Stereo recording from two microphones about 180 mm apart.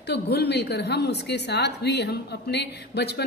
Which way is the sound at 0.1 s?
65° left (ahead or behind).